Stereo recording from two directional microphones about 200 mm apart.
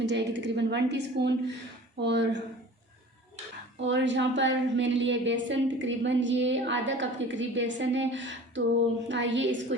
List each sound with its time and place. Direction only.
0.0 s a woman's voice: 60° right (ahead or behind)
3.8 s a woman's voice: 65° right (ahead or behind)